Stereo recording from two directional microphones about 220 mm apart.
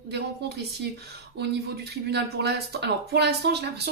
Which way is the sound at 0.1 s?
50° right (ahead or behind).